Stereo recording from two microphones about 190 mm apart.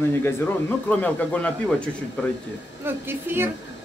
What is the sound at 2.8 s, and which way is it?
Speech, 10° right (ahead or behind).